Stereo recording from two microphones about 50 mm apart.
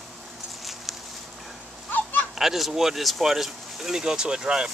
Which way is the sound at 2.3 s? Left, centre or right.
Centre.